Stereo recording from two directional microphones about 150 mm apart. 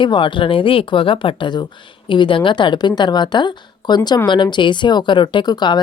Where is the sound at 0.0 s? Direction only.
30° left (ahead or behind).